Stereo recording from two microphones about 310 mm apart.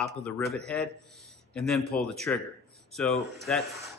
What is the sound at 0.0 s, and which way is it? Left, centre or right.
Speech, centre.